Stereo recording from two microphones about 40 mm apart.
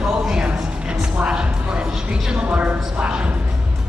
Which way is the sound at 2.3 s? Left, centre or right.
Right.